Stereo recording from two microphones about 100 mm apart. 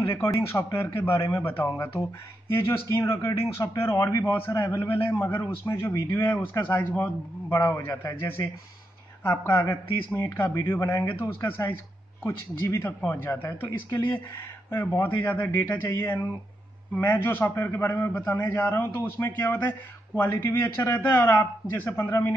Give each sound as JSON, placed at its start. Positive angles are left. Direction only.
{"t": 0.0, "sound": "a man's voice", "side_deg": 30}
{"t": 4.3, "sound": "a man's voice", "side_deg": 20}
{"t": 15.0, "sound": "a man's voice", "side_deg": 15}